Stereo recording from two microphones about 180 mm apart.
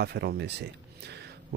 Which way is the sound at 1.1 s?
65° right (ahead or behind).